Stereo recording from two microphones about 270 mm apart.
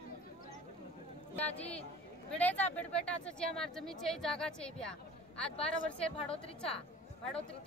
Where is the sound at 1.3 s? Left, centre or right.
Centre.